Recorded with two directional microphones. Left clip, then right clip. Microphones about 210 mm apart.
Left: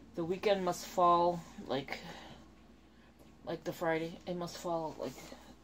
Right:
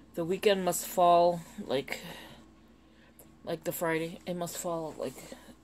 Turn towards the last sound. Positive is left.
turn(degrees=-55)  # may be behind; listen again after turning